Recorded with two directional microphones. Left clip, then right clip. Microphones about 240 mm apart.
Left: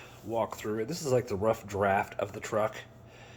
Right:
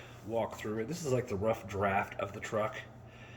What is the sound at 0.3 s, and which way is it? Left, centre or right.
Speech, centre.